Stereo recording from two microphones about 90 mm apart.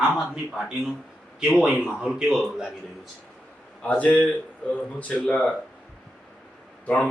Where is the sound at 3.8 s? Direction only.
15° left (ahead or behind).